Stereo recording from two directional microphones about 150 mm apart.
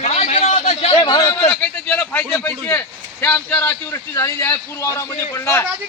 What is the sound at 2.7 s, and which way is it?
A man's voice, 15° left (ahead or behind).